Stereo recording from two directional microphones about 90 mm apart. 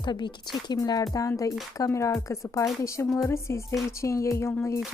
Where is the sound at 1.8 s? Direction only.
35° left (ahead or behind).